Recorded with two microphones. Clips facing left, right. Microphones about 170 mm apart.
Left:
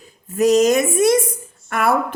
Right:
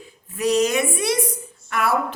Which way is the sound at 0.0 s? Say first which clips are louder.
Left 7 dB; 45° left (ahead or behind).